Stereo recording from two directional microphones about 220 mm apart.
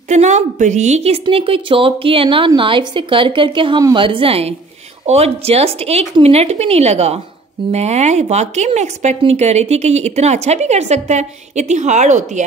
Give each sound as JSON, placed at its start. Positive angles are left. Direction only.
{"t": 0.1, "sound": "a woman's voice", "side_deg": -30}